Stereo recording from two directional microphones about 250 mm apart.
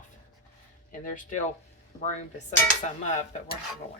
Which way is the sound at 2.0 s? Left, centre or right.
Left.